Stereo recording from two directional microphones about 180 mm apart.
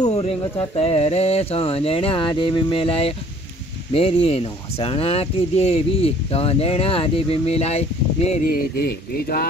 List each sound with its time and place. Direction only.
0.0 s a sound: 35° left (ahead or behind)
0.4 s speech: 30° left (ahead or behind)
8.5 s speech: 55° left (ahead or behind)